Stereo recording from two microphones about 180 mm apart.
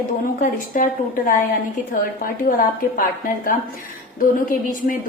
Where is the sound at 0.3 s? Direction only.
50° left (ahead or behind).